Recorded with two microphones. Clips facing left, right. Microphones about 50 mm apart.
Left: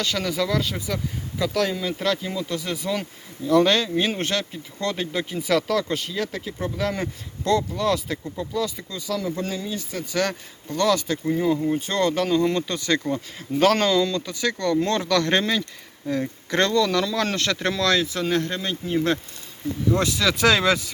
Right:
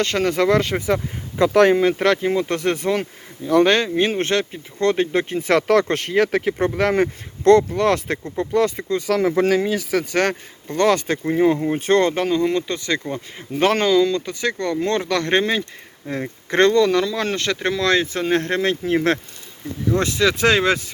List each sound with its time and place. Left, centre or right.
0.0 s speech: right
0.9 s speech: right
3.0 s speech: right
9.3 s speech: right
10.1 s speech: right
11.8 s speech: right
12.2 s speech: centre
17.9 s speech: right
20.0 s speech: right